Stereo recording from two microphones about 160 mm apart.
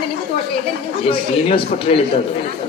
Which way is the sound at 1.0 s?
35° left (ahead or behind).